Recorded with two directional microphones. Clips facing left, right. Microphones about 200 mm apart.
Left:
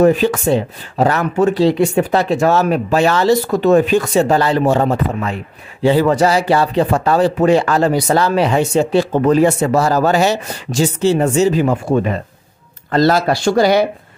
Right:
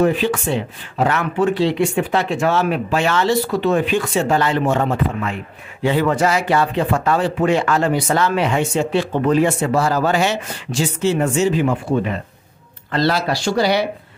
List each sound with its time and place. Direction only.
0.0 s speech: 40° left (ahead or behind)